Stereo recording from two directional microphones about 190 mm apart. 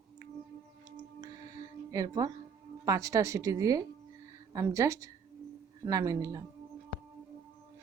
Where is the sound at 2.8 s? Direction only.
15° right (ahead or behind).